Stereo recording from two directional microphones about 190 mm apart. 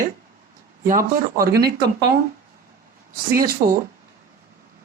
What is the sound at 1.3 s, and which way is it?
Speech, 55° right (ahead or behind).